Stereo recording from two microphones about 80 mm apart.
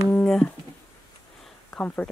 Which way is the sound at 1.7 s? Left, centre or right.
Centre.